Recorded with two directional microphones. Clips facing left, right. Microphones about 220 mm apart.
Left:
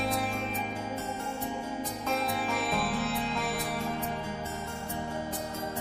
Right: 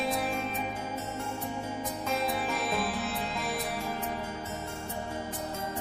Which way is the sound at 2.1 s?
Centre (ahead or behind).